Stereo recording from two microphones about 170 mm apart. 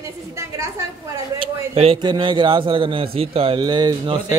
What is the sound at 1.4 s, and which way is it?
A man's voice, 35° right (ahead or behind).